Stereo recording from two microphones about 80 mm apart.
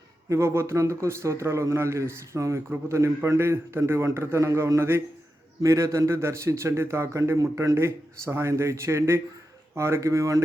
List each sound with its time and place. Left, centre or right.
0.3 s a man's voice: right